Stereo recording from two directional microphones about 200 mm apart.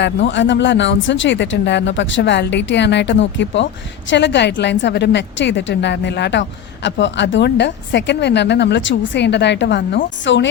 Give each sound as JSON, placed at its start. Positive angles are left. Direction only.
{"t": 0.0, "sound": "speech", "side_deg": 60}